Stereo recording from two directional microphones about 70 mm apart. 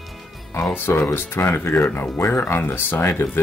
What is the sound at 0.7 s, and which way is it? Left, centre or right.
Speech, left.